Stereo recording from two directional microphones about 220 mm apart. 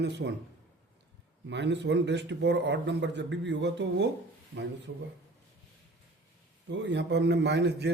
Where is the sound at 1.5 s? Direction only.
50° right (ahead or behind).